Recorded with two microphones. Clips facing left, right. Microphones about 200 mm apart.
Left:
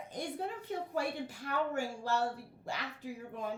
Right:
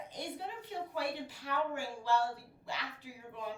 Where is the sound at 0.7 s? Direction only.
45° left (ahead or behind).